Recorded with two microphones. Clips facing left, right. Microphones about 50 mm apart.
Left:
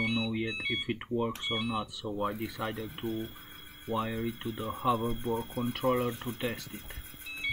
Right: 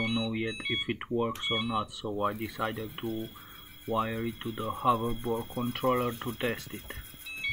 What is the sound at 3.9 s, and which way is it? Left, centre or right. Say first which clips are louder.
Speech: right 2 dB; centre.